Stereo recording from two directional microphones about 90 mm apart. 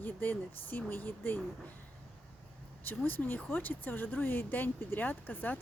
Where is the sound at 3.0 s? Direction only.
20° left (ahead or behind).